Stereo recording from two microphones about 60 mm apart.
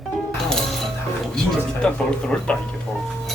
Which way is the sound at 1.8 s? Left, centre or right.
Centre.